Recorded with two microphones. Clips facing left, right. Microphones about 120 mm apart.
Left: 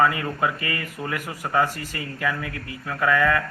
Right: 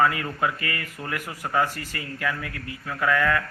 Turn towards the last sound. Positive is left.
turn(degrees=5)  # may be behind; listen again after turning